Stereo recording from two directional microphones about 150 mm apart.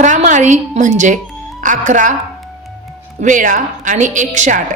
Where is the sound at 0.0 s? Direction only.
55° right (ahead or behind).